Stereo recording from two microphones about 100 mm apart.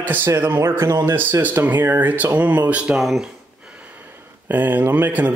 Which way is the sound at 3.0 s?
Centre (ahead or behind).